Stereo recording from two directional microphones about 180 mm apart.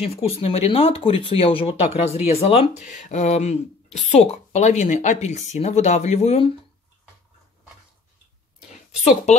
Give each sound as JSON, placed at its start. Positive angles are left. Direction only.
{"t": 0.0, "sound": "speech", "side_deg": 35}
{"t": 9.0, "sound": "speech", "side_deg": 40}